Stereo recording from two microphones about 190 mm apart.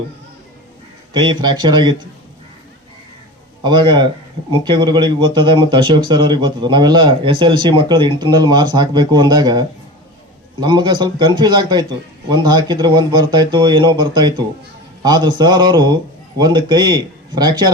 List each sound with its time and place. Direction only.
1.1 s speech: 25° right (ahead or behind)
3.6 s speech: 25° right (ahead or behind)